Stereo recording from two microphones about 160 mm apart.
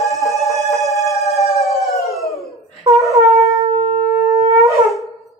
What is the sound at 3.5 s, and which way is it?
Shofar, 40° right (ahead or behind).